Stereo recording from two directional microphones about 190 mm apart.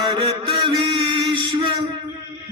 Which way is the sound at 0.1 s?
30° right (ahead or behind).